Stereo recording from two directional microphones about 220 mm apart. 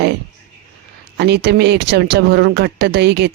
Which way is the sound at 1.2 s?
50° right (ahead or behind).